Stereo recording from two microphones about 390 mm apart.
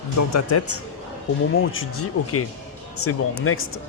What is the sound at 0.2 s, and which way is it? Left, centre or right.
Speech, left.